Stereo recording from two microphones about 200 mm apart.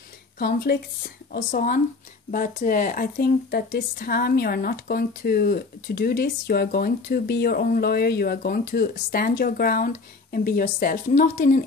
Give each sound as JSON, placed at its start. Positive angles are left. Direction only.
{"t": 0.4, "sound": "speech", "side_deg": 50}